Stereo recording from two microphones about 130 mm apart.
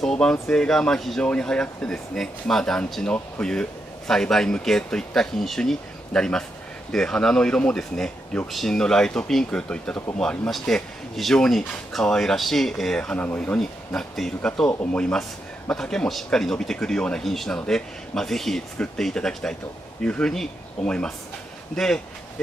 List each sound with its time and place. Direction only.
0.0 s speech: 5° left (ahead or behind)
14.7 s speech: 20° left (ahead or behind)
15.0 s speech: 5° left (ahead or behind)